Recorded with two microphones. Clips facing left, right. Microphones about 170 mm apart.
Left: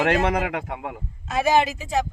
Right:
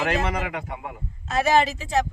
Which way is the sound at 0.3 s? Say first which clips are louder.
Left 4 dB; 70° left (ahead or behind).